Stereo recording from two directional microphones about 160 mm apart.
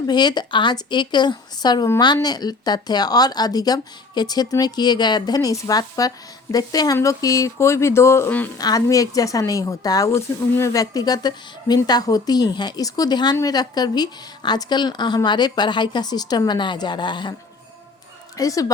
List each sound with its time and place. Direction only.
0.1 s speech: 25° left (ahead or behind)
18.3 s speech: 20° left (ahead or behind)